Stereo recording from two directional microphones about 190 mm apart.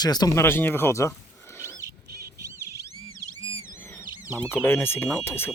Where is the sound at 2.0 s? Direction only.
15° right (ahead or behind).